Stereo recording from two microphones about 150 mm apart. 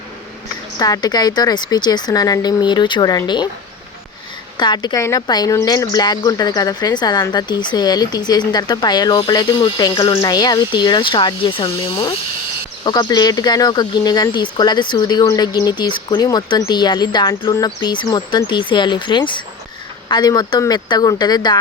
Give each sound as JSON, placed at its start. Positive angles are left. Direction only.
{"t": 0.8, "sound": "speech", "side_deg": 25}
{"t": 4.5, "sound": "speech", "side_deg": 30}